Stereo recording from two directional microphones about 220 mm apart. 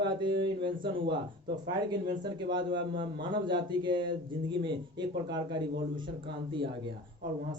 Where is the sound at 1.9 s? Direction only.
20° right (ahead or behind).